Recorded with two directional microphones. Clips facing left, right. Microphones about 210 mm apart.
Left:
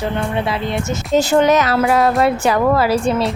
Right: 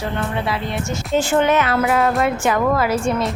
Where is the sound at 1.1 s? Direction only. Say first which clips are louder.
Left 3 dB; 40° left (ahead or behind).